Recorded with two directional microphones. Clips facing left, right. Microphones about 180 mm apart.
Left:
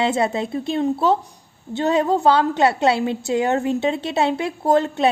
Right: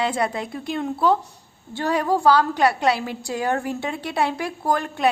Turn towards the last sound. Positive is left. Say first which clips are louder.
# left 6 dB
turn(degrees=25)  # may be behind; listen again after turning